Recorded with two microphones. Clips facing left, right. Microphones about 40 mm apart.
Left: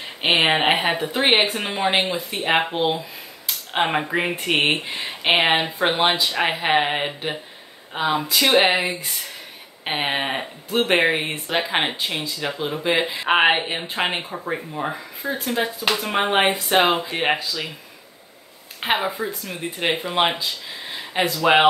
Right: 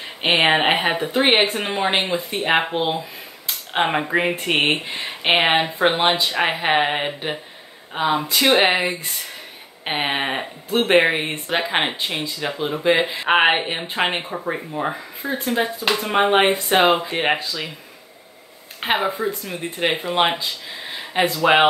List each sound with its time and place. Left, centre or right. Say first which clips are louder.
0.2 s speech: right 1 dB; centre
13.8 s speech: right 3 dB; right
14.1 s speech: right 2 dB; centre
18.8 s speech: right 1 dB; centre